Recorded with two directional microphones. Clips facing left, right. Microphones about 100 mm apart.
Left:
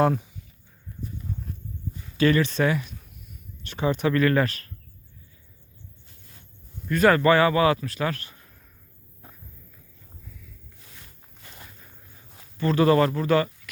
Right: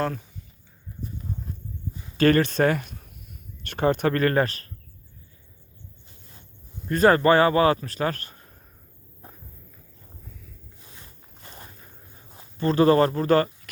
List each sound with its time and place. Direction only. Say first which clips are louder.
0.0 s speech: left 6 dB; 10° left (ahead or behind)
2.1 s speech: right 2 dB; 45° right (ahead or behind)
6.8 s speech: right 1 dB; 35° right (ahead or behind)
10.8 s walk: right 2 dB; 25° right (ahead or behind)
12.3 s speech: right 1 dB; 30° right (ahead or behind)